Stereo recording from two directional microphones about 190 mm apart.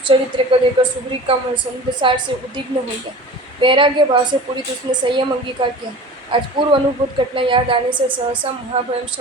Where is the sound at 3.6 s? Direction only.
25° right (ahead or behind).